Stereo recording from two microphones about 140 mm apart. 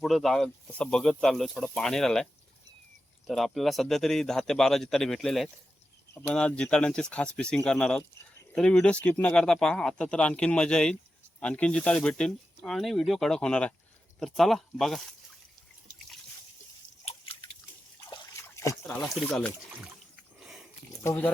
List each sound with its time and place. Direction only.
0.0 s speech: centre (ahead or behind)
3.2 s speech: centre (ahead or behind)
17.0 s drip: 45° left (ahead or behind)
18.3 s trickle: 20° left (ahead or behind)
19.1 s speech: 5° left (ahead or behind)
20.4 s a sound: centre (ahead or behind)
21.0 s speech: 20° left (ahead or behind)